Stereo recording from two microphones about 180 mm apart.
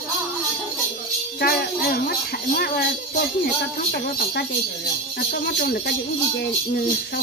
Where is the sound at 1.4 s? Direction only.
55° left (ahead or behind).